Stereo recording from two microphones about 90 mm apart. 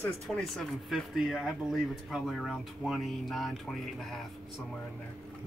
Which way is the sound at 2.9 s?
Centre (ahead or behind).